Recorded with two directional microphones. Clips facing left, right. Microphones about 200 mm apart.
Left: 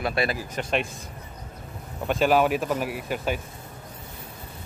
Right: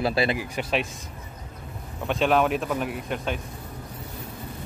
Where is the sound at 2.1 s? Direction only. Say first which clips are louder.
Left 1 dB; centre (ahead or behind).